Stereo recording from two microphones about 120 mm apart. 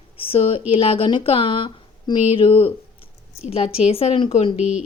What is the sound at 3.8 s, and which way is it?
Speech, 60° left (ahead or behind).